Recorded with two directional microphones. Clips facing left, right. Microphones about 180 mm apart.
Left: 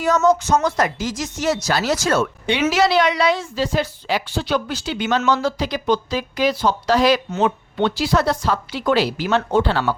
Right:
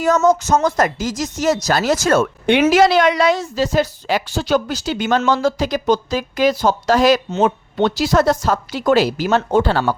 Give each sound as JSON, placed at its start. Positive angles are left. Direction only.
{"t": 0.0, "sound": "speech", "side_deg": -45}